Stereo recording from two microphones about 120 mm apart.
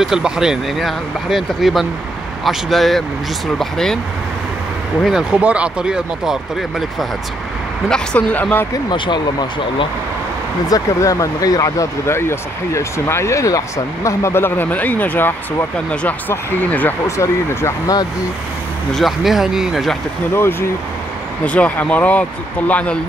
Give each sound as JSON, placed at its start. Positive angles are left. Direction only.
{"t": 0.0, "sound": "speech", "side_deg": -5}
{"t": 5.0, "sound": "speech", "side_deg": -5}
{"t": 7.9, "sound": "speech", "side_deg": 10}
{"t": 8.9, "sound": "speech", "side_deg": 40}
{"t": 10.7, "sound": "speech", "side_deg": 30}
{"t": 18.9, "sound": "speech", "side_deg": 0}
{"t": 20.3, "sound": "speech", "side_deg": 20}